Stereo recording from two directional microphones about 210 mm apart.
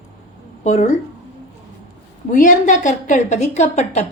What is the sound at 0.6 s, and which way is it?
Speech, 35° left (ahead or behind).